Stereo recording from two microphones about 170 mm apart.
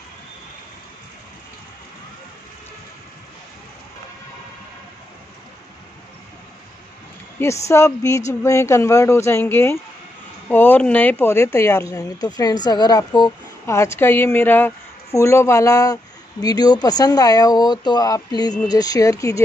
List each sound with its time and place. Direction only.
7.3 s a woman's voice: 15° left (ahead or behind)
13.7 s a woman's voice: 15° left (ahead or behind)